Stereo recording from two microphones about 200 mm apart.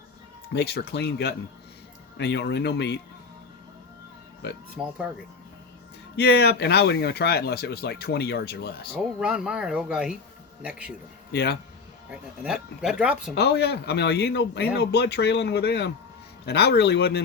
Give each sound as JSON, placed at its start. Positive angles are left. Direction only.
{"t": 0.5, "sound": "speech", "side_deg": 55}
{"t": 4.8, "sound": "speech", "side_deg": -5}
{"t": 6.1, "sound": "speech", "side_deg": 55}
{"t": 8.9, "sound": "speech", "side_deg": -5}
{"t": 11.3, "sound": "a man's voice", "side_deg": 50}
{"t": 12.1, "sound": "speech", "side_deg": -5}
{"t": 13.3, "sound": "speech", "side_deg": 55}